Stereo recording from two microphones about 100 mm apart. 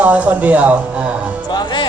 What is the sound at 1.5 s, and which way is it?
Speech, 50° left (ahead or behind).